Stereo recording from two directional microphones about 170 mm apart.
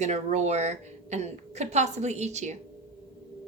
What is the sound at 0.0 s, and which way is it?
A woman's voice, 40° right (ahead or behind).